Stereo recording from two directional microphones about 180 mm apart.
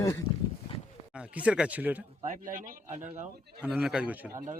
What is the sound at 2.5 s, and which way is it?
Speech, 50° right (ahead or behind).